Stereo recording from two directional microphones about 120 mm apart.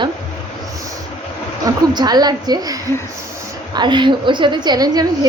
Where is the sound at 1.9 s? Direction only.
35° right (ahead or behind).